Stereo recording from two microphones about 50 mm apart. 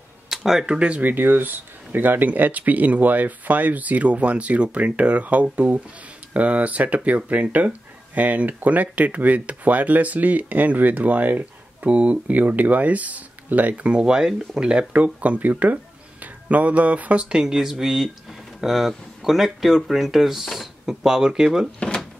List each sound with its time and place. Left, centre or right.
0.3 s speech: centre
0.7 s speech: right
1.0 s speech: right
13.9 s speech: centre
15.1 s speech: right
17.4 s speech: centre
21.7 s drawer open or close: centre